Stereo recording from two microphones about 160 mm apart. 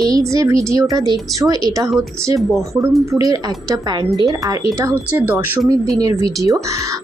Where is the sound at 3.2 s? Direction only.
25° right (ahead or behind).